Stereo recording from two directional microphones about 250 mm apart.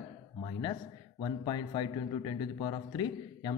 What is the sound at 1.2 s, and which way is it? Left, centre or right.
A man's voice, centre.